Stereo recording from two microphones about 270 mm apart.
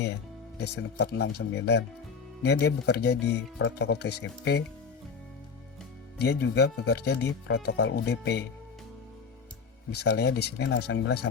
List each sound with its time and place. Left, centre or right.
0.6 s speech: left
6.1 s speech: left
9.9 s speech: left